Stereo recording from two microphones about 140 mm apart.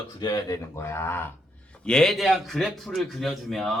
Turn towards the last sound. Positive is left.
turn(degrees=0)  # may be behind; listen again after turning